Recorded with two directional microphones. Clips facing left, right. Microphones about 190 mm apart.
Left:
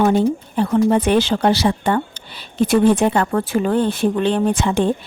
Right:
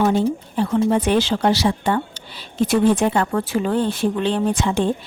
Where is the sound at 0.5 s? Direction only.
55° left (ahead or behind).